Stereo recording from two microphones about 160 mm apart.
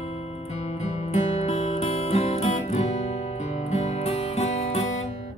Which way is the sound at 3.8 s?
40° left (ahead or behind).